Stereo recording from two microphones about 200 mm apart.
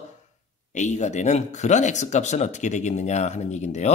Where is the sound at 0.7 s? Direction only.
35° left (ahead or behind).